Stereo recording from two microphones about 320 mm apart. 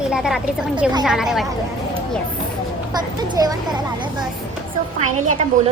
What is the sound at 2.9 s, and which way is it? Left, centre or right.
Speech, centre.